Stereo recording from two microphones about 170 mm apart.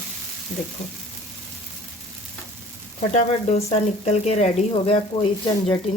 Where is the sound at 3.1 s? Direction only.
40° left (ahead or behind).